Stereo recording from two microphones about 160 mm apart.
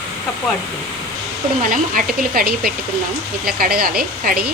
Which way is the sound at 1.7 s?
65° right (ahead or behind).